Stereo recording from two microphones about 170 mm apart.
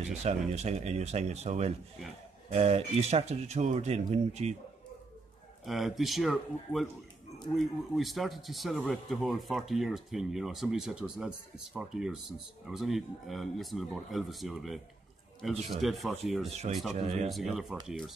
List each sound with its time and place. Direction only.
0.2 s speech: 40° right (ahead or behind)
5.7 s speech: centre (ahead or behind)
16.4 s speech: 40° right (ahead or behind)
17.3 s speech: centre (ahead or behind)